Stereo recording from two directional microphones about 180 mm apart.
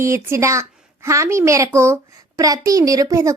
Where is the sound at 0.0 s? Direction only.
15° right (ahead or behind).